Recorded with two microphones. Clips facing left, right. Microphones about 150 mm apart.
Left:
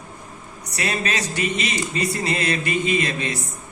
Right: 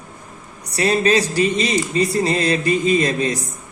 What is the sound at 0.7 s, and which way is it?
Speech, 35° right (ahead or behind).